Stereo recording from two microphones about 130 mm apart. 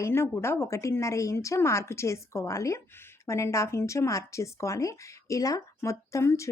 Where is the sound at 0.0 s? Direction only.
20° left (ahead or behind).